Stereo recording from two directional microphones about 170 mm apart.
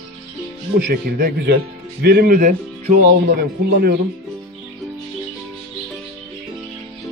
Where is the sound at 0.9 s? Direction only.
60° right (ahead or behind).